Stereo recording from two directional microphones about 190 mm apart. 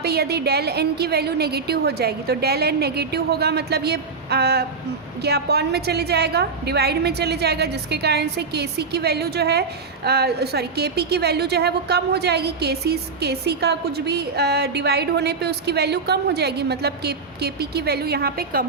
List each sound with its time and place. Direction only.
0.0 s a woman's voice: 55° right (ahead or behind)